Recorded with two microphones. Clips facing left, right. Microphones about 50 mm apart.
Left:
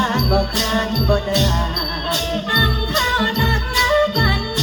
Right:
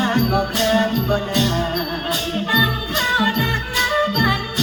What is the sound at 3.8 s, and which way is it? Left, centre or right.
Music, centre.